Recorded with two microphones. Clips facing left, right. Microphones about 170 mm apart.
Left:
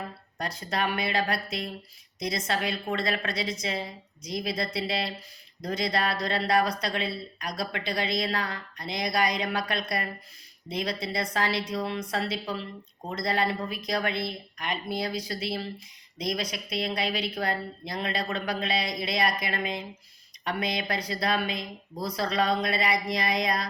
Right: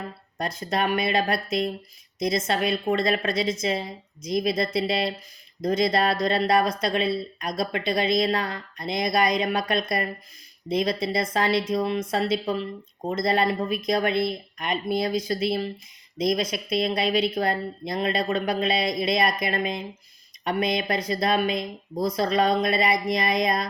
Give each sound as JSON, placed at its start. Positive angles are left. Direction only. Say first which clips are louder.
{"t": 0.3, "sound": "speech", "louder": "right 4 dB", "side_deg": -20}
{"t": 13.7, "sound": "speech", "louder": "right 6 dB", "side_deg": -20}